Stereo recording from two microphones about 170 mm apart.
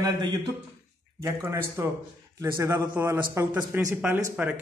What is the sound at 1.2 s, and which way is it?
A man's voice, 15° right (ahead or behind).